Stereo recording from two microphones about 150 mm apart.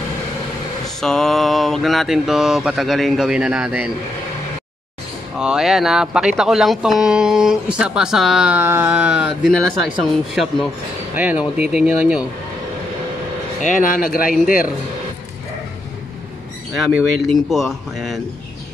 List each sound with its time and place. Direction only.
0.8 s speech: 5° left (ahead or behind)
5.4 s speech: 5° right (ahead or behind)
9.5 s speech: 5° left (ahead or behind)
13.6 s speech: 60° left (ahead or behind)
16.7 s speech: centre (ahead or behind)